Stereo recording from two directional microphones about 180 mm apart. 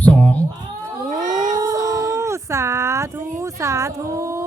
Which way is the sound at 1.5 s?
20° right (ahead or behind).